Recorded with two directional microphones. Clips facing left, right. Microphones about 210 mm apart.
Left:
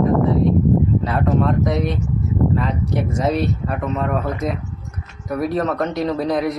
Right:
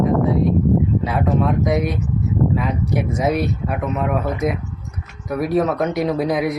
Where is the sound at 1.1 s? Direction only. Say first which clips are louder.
Even; 5° right (ahead or behind).